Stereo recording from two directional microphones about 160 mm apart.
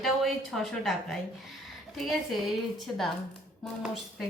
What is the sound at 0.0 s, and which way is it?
A woman's voice, centre (ahead or behind).